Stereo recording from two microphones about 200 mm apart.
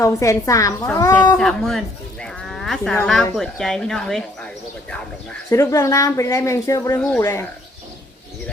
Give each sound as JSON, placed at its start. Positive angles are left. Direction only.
{"t": 0.0, "sound": "speech", "side_deg": 15}
{"t": 1.4, "sound": "speech", "side_deg": 0}
{"t": 2.2, "sound": "livestock", "side_deg": 0}
{"t": 3.3, "sound": "speech", "side_deg": 0}
{"t": 5.5, "sound": "speech", "side_deg": 15}